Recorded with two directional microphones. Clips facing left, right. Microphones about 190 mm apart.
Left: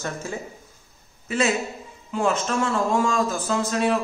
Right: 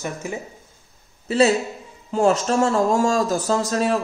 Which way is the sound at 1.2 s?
35° right (ahead or behind).